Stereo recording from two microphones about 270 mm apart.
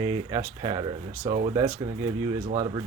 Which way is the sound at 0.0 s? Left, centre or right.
Centre.